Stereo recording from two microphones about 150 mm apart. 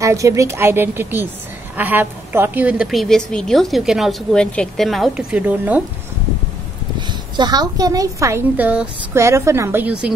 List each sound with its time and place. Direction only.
0.0 s a woman's voice: 20° right (ahead or behind)
7.0 s a woman's voice: 30° right (ahead or behind); by 10.1 s 10° right (ahead or behind)